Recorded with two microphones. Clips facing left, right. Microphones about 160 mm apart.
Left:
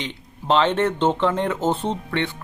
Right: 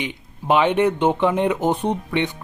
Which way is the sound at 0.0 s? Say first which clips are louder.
Right 3 dB; 10° right (ahead or behind).